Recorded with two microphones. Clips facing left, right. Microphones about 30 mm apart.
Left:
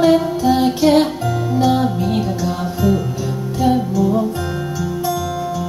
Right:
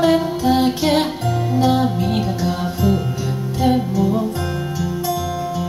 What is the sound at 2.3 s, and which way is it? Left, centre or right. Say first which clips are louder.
Music: even; right.